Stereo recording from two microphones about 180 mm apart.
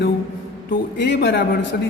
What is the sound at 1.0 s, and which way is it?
Speech, 80° left.